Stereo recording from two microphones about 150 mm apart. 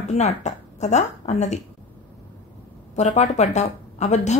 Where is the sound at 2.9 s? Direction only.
50° left (ahead or behind).